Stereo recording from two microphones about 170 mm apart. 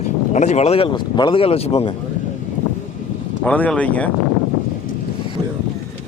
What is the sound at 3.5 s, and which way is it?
Speech, 5° left (ahead or behind).